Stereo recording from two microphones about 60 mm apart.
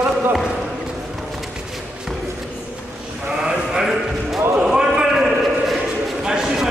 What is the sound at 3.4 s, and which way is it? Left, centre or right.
A man's voice, centre.